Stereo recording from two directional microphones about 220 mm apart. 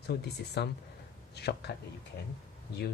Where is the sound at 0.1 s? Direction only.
50° left (ahead or behind).